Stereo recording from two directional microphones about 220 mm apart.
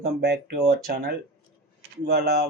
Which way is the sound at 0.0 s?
45° right (ahead or behind).